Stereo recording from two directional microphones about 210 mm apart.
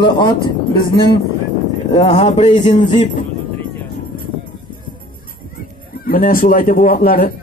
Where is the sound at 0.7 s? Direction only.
20° left (ahead or behind); by 3.3 s 35° left (ahead or behind).